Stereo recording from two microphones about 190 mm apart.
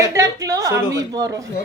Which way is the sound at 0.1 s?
15° right (ahead or behind).